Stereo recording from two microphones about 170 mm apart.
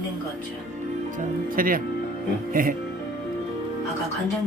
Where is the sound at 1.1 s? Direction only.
55° right (ahead or behind).